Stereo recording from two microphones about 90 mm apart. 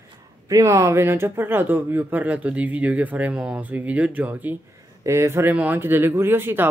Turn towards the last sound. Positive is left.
turn(degrees=-25)  # may be behind; listen again after turning